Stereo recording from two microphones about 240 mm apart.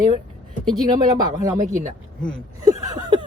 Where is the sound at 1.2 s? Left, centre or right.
Centre.